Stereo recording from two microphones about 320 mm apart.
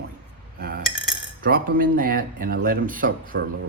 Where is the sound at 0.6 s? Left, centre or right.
Right.